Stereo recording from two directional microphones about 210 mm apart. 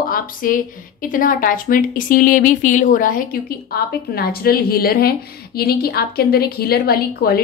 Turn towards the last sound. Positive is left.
turn(degrees=45)  # may be behind; listen again after turning